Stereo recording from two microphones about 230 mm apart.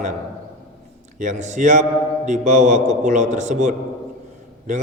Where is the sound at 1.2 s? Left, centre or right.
Right.